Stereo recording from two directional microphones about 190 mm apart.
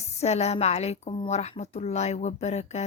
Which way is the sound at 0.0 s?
35° left (ahead or behind).